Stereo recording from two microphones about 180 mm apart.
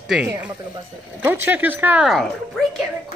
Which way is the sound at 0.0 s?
5° right (ahead or behind).